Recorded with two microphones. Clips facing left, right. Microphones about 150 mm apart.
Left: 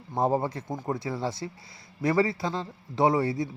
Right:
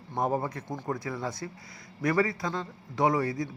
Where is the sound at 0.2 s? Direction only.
25° left (ahead or behind).